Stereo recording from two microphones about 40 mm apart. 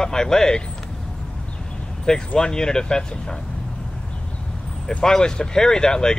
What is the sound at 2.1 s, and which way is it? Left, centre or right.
Speech, left.